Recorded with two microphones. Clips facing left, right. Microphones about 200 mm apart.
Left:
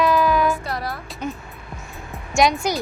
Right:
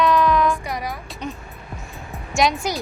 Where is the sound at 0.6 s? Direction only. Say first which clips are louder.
Even; 15° right (ahead or behind).